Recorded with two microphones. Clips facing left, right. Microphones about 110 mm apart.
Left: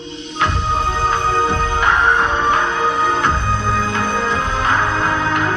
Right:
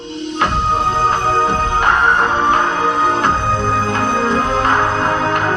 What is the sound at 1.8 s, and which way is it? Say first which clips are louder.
Music: right 1 dB; 40° right (ahead or behind).